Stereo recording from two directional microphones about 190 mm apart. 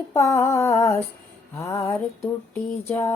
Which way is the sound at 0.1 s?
15° left (ahead or behind).